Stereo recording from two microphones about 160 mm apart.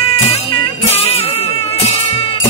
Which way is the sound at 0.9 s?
40° left (ahead or behind).